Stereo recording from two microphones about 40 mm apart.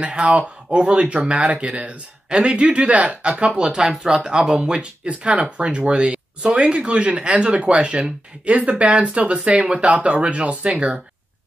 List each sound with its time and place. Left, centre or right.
0.0 s speech: right